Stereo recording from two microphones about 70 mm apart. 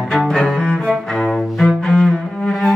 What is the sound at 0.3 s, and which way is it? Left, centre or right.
Cello, centre.